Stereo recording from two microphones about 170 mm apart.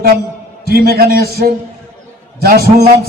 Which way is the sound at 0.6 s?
60° right (ahead or behind).